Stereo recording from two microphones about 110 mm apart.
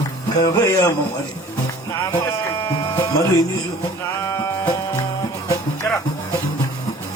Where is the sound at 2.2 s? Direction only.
25° left (ahead or behind).